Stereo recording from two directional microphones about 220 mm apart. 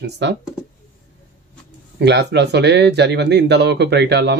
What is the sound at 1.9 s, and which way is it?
Speech, 50° right (ahead or behind).